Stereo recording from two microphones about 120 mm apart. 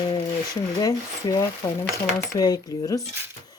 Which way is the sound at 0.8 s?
30° left (ahead or behind).